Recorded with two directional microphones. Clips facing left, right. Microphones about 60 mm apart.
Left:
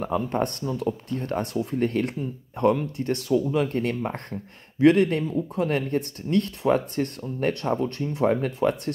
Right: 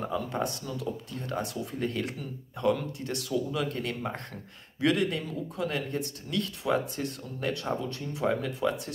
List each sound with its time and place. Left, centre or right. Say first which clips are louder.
0.0 s speech: left 6 dB; left